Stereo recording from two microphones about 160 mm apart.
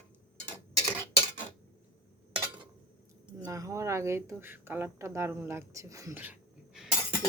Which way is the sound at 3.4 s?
20° right (ahead or behind).